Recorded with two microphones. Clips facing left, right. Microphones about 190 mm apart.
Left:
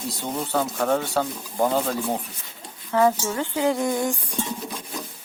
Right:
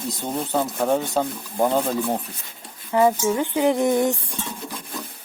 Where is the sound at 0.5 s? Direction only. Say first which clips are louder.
Right 1 dB; 15° right (ahead or behind).